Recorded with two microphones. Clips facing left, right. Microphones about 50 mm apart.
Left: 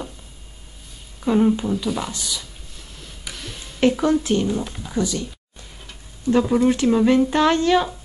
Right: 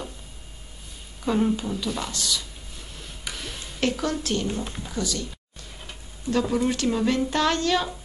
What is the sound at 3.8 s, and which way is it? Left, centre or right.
A woman's voice, centre.